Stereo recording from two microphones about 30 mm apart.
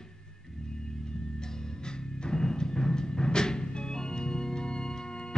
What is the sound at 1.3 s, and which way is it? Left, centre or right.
Music, left.